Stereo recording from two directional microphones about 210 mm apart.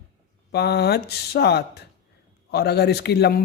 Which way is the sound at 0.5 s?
50° left (ahead or behind).